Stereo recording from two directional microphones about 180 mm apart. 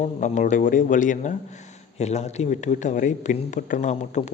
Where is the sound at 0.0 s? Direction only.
45° left (ahead or behind).